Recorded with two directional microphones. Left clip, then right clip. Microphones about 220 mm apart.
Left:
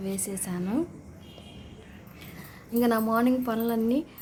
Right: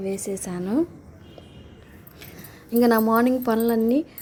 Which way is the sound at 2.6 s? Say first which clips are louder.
Right 6 dB; 25° right (ahead or behind).